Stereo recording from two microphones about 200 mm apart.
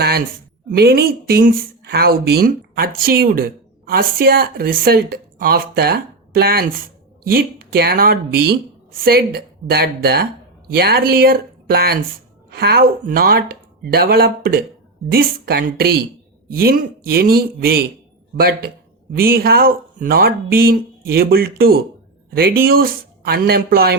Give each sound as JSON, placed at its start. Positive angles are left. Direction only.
{"t": 0.8, "sound": "speech", "side_deg": -50}